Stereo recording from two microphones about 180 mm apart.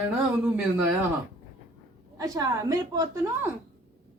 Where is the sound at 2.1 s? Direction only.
20° right (ahead or behind).